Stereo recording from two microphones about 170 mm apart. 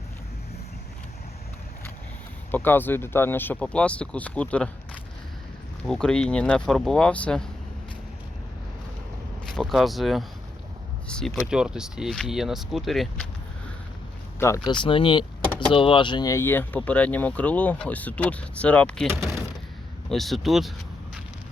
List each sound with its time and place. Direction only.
2.5 s speech: 10° left (ahead or behind)
5.8 s speech: 5° left (ahead or behind)
9.5 s speech: centre (ahead or behind)
14.3 s speech: 15° left (ahead or behind)
20.1 s speech: centre (ahead or behind)